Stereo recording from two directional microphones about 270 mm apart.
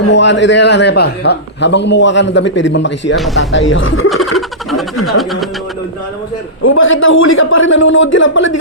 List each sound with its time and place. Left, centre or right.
0.1 s a man's voice: left
4.1 s snicker: centre
6.6 s a man's voice: left